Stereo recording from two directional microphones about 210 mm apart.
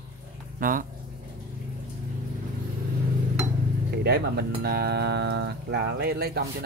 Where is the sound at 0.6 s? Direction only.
40° right (ahead or behind).